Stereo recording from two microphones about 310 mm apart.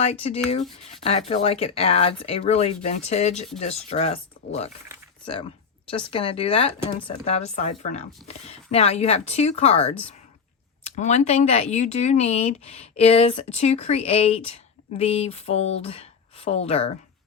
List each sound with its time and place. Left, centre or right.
0.0 s speech: centre
5.2 s a sound: centre
6.1 s speech: centre